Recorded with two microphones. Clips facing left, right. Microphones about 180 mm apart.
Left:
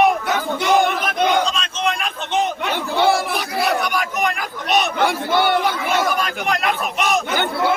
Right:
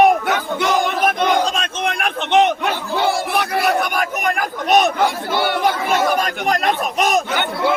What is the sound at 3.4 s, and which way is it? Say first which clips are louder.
Crowd: right 2 dB; 60° right (ahead or behind).